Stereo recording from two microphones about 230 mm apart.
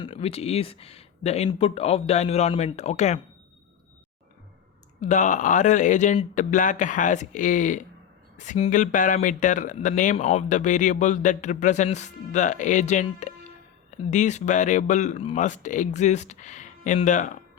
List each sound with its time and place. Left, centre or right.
0.0 s speech: left
4.9 s speech: left